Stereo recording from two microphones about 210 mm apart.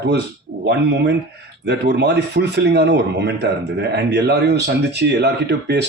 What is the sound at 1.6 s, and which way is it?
Speech, 55° right (ahead or behind).